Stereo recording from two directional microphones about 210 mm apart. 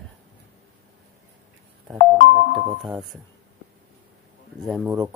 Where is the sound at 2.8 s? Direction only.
Centre (ahead or behind).